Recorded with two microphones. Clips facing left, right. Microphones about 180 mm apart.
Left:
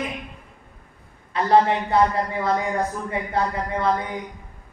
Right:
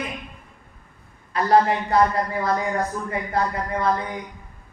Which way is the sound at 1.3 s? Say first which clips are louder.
Even; 25° left (ahead or behind).